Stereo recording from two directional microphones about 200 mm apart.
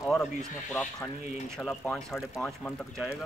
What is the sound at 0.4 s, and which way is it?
Speech, centre (ahead or behind).